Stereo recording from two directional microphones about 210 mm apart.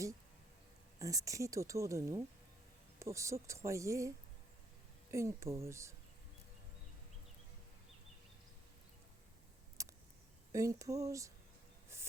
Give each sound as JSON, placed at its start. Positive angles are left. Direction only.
{"t": 0.9, "sound": "speech", "side_deg": -15}
{"t": 5.1, "sound": "speech", "side_deg": -15}
{"t": 9.8, "sound": "a sound", "side_deg": -15}
{"t": 10.5, "sound": "speech", "side_deg": -15}
{"t": 11.9, "sound": "rub", "side_deg": -15}